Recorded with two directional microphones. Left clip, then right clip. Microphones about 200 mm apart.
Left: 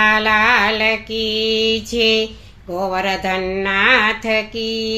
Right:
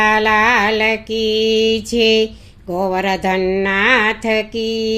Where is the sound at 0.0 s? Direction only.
40° right (ahead or behind).